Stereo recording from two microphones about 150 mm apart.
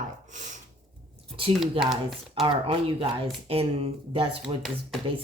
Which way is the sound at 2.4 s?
35° right (ahead or behind).